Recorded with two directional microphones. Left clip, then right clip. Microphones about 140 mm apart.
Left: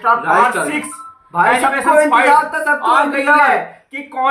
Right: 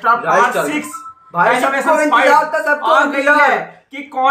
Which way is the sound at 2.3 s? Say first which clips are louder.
Even; 25° left (ahead or behind).